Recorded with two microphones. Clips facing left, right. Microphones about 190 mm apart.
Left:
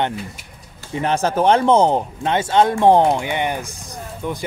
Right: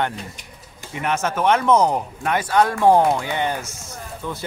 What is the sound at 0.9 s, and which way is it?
Speech, 30° left (ahead or behind).